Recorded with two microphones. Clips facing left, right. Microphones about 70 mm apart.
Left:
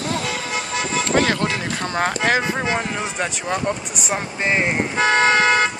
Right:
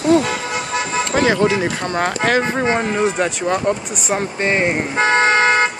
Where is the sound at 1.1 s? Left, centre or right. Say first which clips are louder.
Right 5 dB; centre.